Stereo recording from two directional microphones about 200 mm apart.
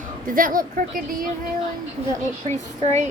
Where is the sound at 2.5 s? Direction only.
35° right (ahead or behind).